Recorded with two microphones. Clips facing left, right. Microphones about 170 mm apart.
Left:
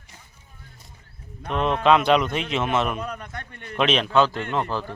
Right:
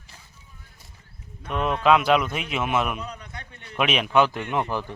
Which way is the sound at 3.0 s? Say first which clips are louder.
Left 4 dB; 55° left (ahead or behind).